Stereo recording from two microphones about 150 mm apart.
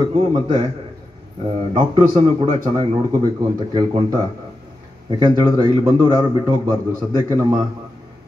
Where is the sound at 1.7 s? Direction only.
30° right (ahead or behind).